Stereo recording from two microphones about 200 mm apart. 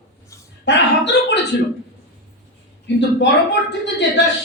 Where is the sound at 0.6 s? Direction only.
60° left (ahead or behind).